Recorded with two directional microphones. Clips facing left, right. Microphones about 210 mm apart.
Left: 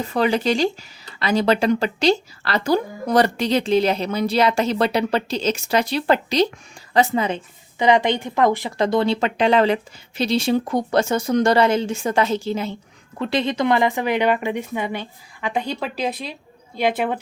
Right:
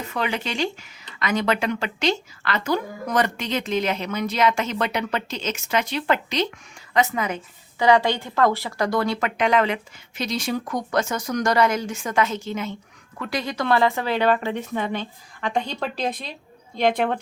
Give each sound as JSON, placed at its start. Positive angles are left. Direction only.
{"t": 0.0, "sound": "a woman's voice", "side_deg": 35}